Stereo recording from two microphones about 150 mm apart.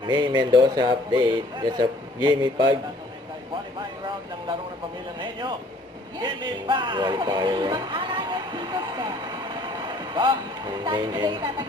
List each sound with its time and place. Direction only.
0.0 s speech: 30° right (ahead or behind)
3.8 s vehicle: 30° right (ahead or behind)
6.1 s music: 30° right (ahead or behind)
10.8 s speech: 30° right (ahead or behind)